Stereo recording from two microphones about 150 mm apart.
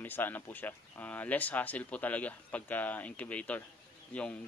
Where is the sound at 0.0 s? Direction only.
10° left (ahead or behind).